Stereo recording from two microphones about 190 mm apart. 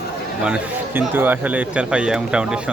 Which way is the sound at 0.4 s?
10° right (ahead or behind).